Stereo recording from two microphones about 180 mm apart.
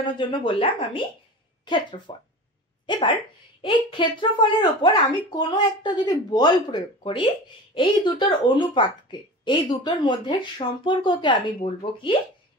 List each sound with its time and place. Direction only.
0.2 s speech: 30° left (ahead or behind)